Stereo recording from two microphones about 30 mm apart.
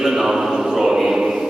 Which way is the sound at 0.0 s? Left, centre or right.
Centre.